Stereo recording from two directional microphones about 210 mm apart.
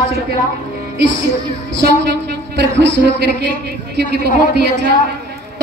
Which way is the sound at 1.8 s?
55° right (ahead or behind).